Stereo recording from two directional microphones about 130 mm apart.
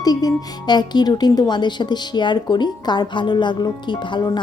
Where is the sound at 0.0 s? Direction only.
30° left (ahead or behind).